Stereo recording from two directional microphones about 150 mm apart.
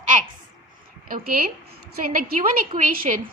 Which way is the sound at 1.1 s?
75° right (ahead or behind).